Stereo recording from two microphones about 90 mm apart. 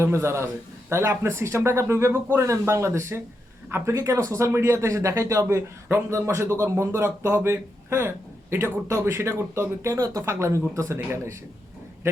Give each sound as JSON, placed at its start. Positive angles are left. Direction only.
{"t": 0.0, "sound": "speech", "side_deg": -30}